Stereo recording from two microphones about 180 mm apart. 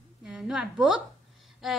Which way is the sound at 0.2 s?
5° right (ahead or behind).